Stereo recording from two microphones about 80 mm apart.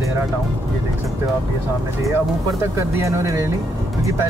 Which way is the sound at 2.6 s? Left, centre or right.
Right.